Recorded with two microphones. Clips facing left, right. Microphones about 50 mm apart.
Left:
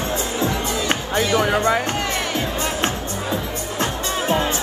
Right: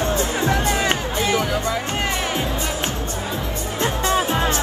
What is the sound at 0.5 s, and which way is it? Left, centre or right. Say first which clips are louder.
Music: right 3 dB; right.